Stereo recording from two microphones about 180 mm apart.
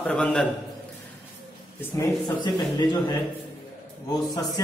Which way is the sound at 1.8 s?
15° left (ahead or behind).